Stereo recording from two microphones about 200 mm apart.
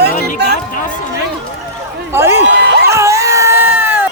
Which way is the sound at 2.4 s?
55° right (ahead or behind).